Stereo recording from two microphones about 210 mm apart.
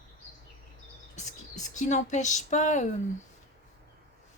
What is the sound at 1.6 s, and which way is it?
Speech, 35° left (ahead or behind).